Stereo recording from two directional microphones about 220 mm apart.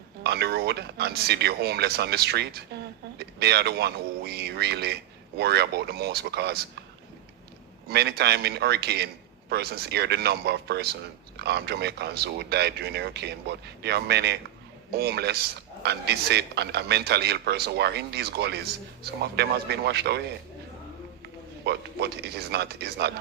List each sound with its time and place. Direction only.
0.2 s a man's voice: 45° right (ahead or behind)
7.9 s a man's voice: 50° right (ahead or behind)
21.6 s a man's voice: 50° right (ahead or behind)